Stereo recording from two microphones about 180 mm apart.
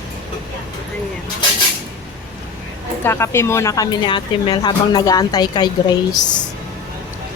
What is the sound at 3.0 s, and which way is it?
A woman's voice, 15° left (ahead or behind).